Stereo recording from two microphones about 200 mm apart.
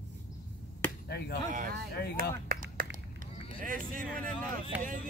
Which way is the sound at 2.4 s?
50° right (ahead or behind).